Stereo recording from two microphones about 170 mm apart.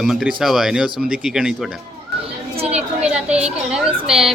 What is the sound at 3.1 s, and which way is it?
Speech, 5° right (ahead or behind).